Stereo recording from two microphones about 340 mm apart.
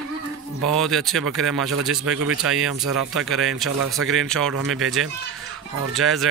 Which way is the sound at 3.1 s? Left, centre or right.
Centre.